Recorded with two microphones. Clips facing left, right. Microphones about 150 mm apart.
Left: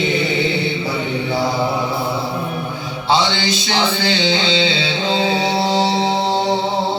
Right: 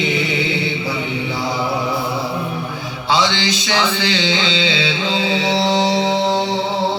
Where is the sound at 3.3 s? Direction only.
40° left (ahead or behind).